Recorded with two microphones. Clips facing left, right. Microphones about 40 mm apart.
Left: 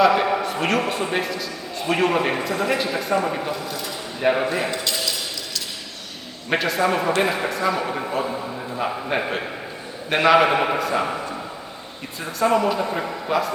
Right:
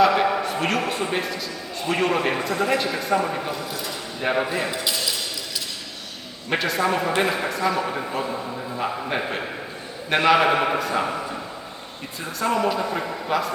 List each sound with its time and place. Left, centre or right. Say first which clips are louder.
0.0 s a man's voice: left 1 dB; centre
6.5 s a man's voice: left 2 dB; centre
12.4 s a man's voice: left 3 dB; centre